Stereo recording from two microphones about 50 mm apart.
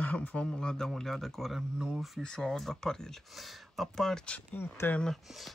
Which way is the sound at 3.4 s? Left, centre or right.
Centre.